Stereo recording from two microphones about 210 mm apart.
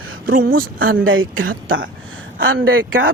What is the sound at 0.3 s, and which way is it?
Speech, 45° right (ahead or behind).